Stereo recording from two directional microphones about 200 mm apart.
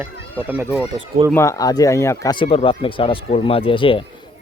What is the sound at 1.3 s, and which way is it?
Speech, 15° left (ahead or behind).